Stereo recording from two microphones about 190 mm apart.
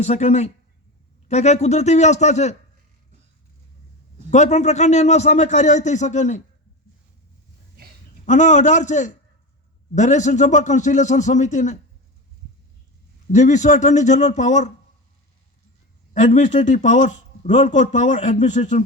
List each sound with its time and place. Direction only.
0.0 s speech: 35° left (ahead or behind)
4.3 s speech: 35° left (ahead or behind)
8.2 s speech: 40° left (ahead or behind)
13.3 s speech: 40° left (ahead or behind)
16.1 s speech: 40° left (ahead or behind)